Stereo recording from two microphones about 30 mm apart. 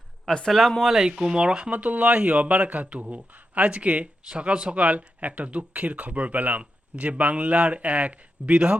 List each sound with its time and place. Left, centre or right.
0.3 s a man's voice: centre
0.8 s speech: centre
1.0 s speech: right
1.7 s speech: right
3.3 s a sound: right
3.7 s speech: right
4.4 s speech: right
4.7 s speech: right
6.9 s speech: right